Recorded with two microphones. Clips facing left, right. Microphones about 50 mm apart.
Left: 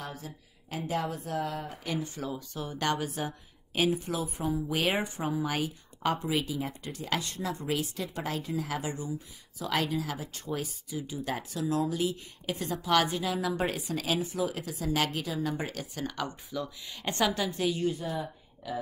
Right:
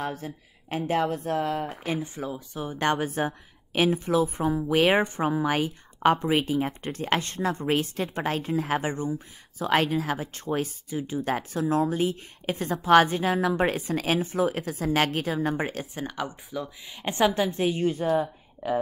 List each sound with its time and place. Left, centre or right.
0.0 s speech: right
1.9 s speech: right
6.8 s a woman's voice: right
18.2 s a sound: right